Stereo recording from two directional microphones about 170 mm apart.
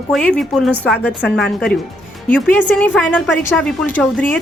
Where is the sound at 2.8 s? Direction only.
10° left (ahead or behind).